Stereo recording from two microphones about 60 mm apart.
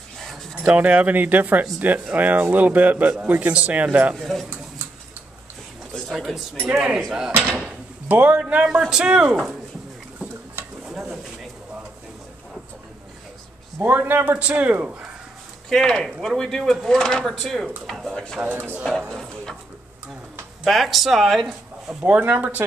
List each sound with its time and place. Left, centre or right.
0.2 s dog: centre
0.7 s speech: right
4.1 s speech: centre
6.1 s speech: centre
7.3 s drawer open or close: right
8.1 s speech: right; by 9.6 s centre
13.7 s speech: right
15.7 s speech: centre
18.1 s speech: centre
18.4 s speech: right
18.9 s speech: centre
20.6 s speech: centre
22.0 s speech: right